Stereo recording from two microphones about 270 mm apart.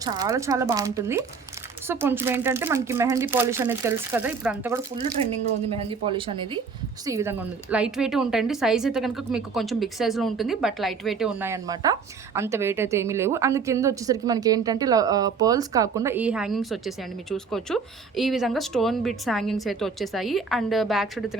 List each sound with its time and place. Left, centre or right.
0.0 s a woman's voice: centre
5.2 s a woman's voice: right; by 21.3 s centre